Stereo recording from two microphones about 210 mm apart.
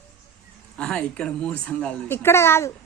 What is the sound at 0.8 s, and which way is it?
A woman's voice, 5° left (ahead or behind).